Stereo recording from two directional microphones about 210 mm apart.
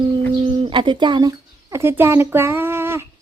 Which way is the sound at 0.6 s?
25° right (ahead or behind).